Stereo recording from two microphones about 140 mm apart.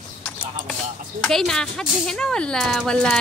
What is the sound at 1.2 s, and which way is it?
Speech, 5° left (ahead or behind).